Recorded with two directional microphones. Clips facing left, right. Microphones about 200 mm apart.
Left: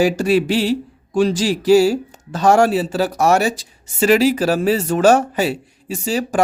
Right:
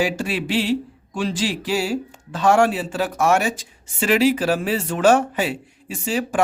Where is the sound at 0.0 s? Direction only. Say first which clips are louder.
Left 7 dB; 40° left (ahead or behind).